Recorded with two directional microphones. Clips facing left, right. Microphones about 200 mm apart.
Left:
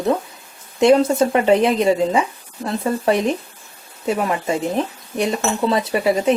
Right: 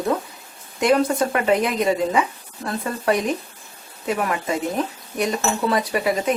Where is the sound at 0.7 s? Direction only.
25° left (ahead or behind).